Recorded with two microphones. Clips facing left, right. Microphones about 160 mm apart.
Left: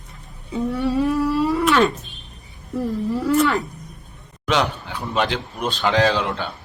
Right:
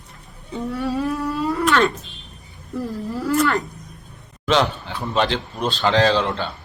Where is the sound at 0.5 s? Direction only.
Centre (ahead or behind).